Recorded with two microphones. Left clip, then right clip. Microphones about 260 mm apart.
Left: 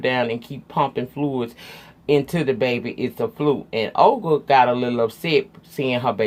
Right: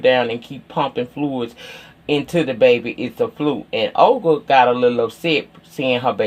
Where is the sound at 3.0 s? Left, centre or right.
Left.